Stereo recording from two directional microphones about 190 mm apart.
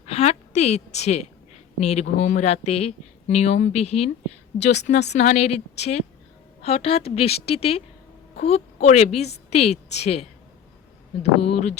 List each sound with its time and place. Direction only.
0.0 s a woman's voice: 35° left (ahead or behind)